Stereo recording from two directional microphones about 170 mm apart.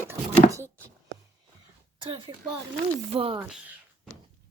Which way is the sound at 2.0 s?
30° right (ahead or behind).